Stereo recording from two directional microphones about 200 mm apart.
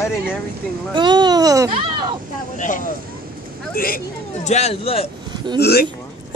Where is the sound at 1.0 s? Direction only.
20° right (ahead or behind).